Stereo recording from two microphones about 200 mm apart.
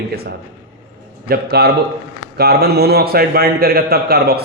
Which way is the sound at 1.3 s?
55° right (ahead or behind).